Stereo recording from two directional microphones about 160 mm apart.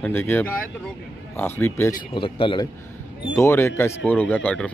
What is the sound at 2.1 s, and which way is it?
Speech, 30° left (ahead or behind).